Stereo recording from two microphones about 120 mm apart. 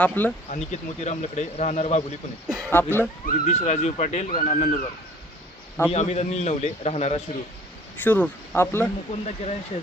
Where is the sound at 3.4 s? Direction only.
65° left (ahead or behind); by 4.8 s 80° left.